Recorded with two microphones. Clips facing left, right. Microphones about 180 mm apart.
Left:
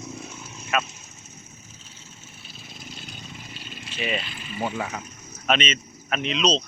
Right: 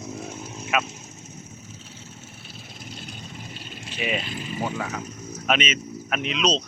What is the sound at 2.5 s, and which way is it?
Vehicle, 60° right (ahead or behind).